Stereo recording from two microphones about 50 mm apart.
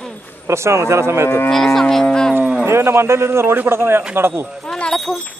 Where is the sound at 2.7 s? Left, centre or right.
Right.